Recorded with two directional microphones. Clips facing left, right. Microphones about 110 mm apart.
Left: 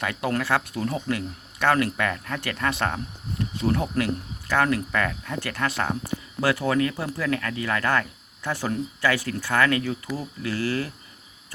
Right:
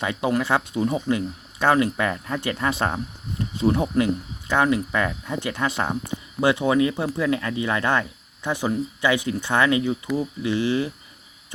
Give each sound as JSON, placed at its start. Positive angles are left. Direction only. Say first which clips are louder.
{"t": 0.0, "sound": "speech", "louder": "right 3 dB", "side_deg": -20}